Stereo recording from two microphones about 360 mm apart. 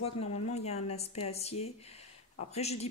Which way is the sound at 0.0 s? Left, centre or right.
Centre.